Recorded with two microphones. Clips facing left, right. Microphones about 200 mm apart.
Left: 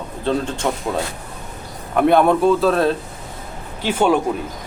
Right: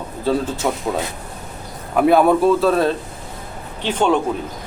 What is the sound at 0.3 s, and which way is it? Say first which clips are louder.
Speech: right 1 dB; 5° right (ahead or behind).